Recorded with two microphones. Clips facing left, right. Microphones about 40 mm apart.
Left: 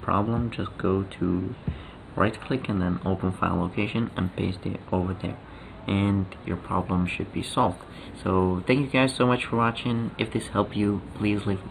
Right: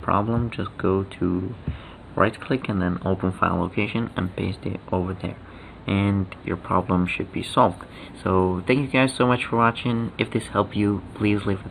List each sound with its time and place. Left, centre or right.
0.0 s speech: centre